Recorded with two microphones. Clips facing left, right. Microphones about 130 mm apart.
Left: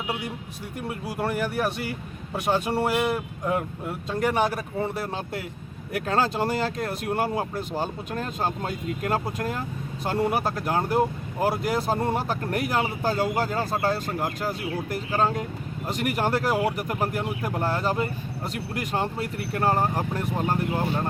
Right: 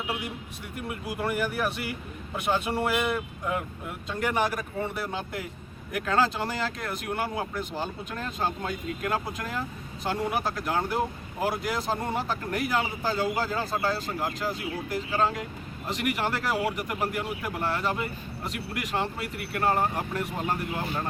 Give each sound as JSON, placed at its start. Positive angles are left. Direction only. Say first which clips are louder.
{"t": 0.8, "sound": "speech", "louder": "left 2 dB", "side_deg": 35}
{"t": 6.1, "sound": "speech", "louder": "left 2 dB", "side_deg": 40}